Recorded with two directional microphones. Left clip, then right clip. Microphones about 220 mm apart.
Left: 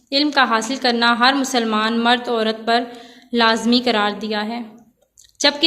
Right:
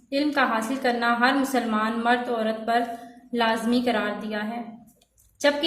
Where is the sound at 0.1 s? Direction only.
50° left (ahead or behind).